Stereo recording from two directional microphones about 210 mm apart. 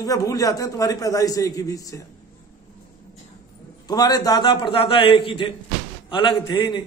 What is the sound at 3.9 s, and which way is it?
A man's voice, 20° left (ahead or behind).